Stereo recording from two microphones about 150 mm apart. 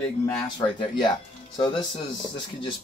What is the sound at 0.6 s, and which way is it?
Speech, 30° left (ahead or behind).